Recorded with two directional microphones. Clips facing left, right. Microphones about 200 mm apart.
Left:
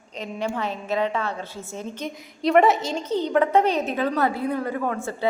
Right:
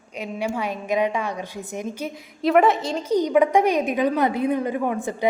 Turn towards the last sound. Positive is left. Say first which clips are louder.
# right 2 dB
turn(degrees=-15)  # may be behind; listen again after turning